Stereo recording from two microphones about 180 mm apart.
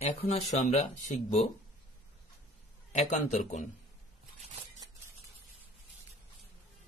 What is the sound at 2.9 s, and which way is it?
Speech, 40° left (ahead or behind).